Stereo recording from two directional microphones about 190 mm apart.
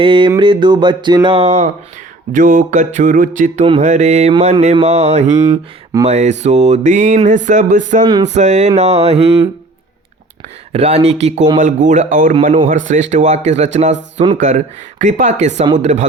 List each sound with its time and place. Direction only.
0.0 s a sound: 25° right (ahead or behind)
2.3 s mantra: 45° right (ahead or behind)
5.5 s speech: 20° right (ahead or behind)
6.1 s mantra: 35° right (ahead or behind)
10.7 s mantra: 35° right (ahead or behind)